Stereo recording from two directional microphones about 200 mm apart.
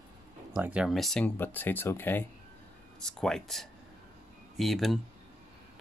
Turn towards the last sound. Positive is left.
turn(degrees=0)  # may be behind; listen again after turning